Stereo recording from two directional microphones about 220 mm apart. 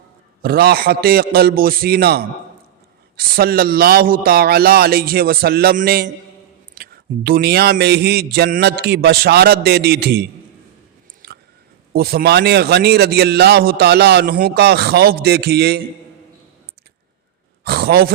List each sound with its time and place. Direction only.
0.4 s a man's voice: 45° right (ahead or behind)
11.2 s biting: 45° right (ahead or behind)
11.9 s a man's voice: 45° right (ahead or behind)
17.6 s speech: 45° right (ahead or behind)